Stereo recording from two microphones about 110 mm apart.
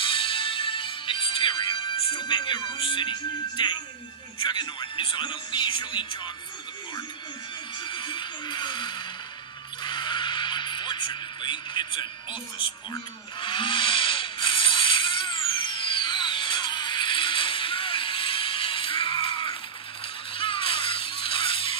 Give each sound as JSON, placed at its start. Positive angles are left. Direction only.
{"t": 0.0, "sound": "music", "side_deg": 55}
{"t": 4.4, "sound": "speech", "side_deg": 45}
{"t": 7.8, "sound": "speech", "side_deg": 45}
{"t": 9.8, "sound": "neigh", "side_deg": 45}
{"t": 13.4, "sound": "a sound", "side_deg": 45}
{"t": 20.3, "sound": "music", "side_deg": 55}